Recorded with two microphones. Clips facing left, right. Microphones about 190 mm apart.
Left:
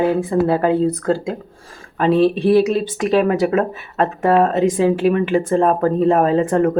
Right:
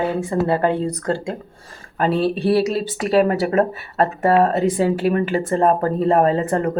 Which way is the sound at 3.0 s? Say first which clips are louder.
Left 1 dB; 40° right (ahead or behind).